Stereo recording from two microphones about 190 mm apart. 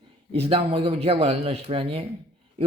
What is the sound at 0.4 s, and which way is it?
A man's voice, 30° right (ahead or behind).